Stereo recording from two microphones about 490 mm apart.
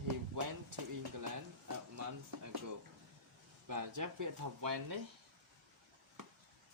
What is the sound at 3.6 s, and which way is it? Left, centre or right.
Speech, right.